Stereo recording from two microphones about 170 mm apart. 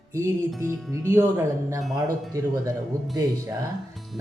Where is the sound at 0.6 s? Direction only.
20° right (ahead or behind).